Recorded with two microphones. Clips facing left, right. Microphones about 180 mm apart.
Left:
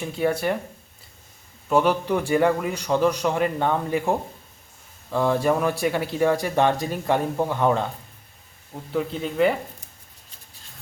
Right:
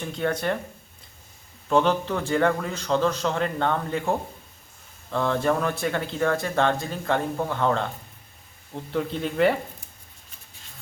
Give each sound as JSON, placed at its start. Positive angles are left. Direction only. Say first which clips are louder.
{"t": 0.0, "sound": "a man's voice", "louder": "left 3 dB", "side_deg": 10}
{"t": 1.7, "sound": "a man's voice", "louder": "left 1 dB", "side_deg": 10}
{"t": 5.1, "sound": "a man's voice", "louder": "left 2 dB", "side_deg": 10}
{"t": 8.7, "sound": "speech", "louder": "left 1 dB", "side_deg": 5}